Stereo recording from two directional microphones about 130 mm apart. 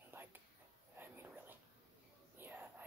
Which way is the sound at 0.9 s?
15° right (ahead or behind).